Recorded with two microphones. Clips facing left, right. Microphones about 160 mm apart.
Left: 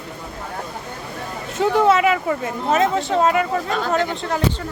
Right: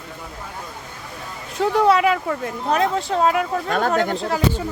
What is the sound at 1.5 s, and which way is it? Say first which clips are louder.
Speech: left 1 dB; centre (ahead or behind).